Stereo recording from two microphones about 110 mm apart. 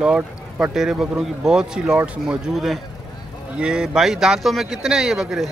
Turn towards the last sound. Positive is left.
turn(degrees=-5)  # may be behind; listen again after turning